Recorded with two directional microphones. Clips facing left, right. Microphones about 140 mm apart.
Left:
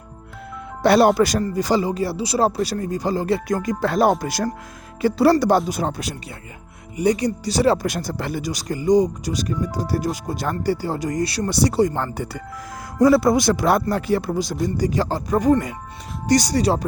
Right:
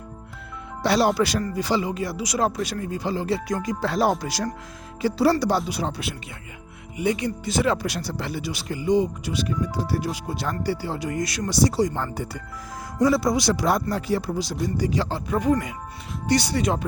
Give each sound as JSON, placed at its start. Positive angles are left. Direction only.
{"t": 0.8, "sound": "speech", "side_deg": 55}
{"t": 7.9, "sound": "speech", "side_deg": 50}
{"t": 11.4, "sound": "speech", "side_deg": 60}